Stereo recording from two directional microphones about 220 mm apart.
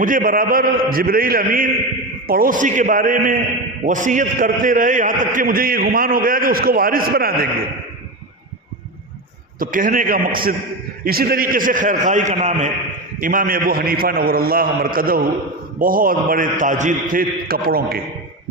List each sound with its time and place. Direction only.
0.0 s a man's voice: 40° right (ahead or behind)
9.6 s a man's voice: 40° right (ahead or behind)